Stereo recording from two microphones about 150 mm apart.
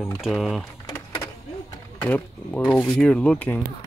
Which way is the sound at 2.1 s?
10° left (ahead or behind).